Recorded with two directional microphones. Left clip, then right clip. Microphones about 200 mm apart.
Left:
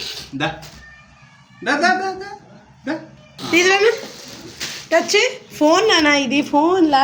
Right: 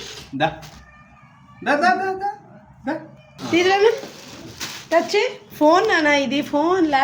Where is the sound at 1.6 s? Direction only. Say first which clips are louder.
Left 1 dB; 55° right (ahead or behind).